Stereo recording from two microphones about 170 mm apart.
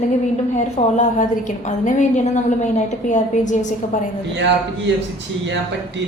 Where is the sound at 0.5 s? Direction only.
45° left (ahead or behind).